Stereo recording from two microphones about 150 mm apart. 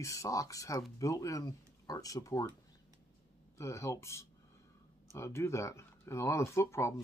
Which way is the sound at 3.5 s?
20° left (ahead or behind).